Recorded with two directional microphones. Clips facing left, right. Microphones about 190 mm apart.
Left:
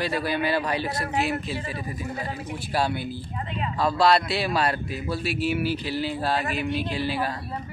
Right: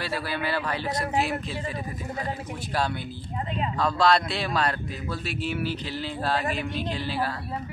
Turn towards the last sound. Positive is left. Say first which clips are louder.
# left 2 dB
turn(degrees=10)  # may be behind; listen again after turning